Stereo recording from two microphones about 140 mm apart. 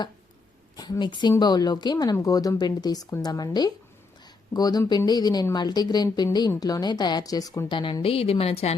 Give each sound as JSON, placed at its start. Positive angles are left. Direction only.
{"t": 0.8, "sound": "a woman's voice", "side_deg": 30}